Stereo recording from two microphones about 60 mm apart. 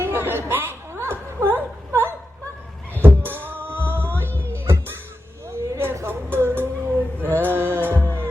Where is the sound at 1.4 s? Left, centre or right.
Right.